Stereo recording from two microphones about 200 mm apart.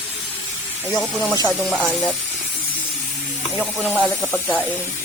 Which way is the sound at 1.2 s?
15° left (ahead or behind).